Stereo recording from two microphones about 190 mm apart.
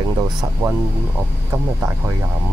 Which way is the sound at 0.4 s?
15° right (ahead or behind).